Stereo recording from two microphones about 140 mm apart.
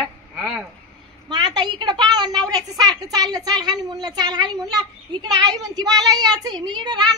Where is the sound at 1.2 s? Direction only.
30° right (ahead or behind).